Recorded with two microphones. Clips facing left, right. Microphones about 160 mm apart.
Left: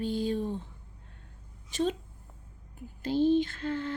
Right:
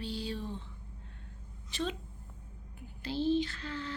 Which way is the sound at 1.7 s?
45° left (ahead or behind).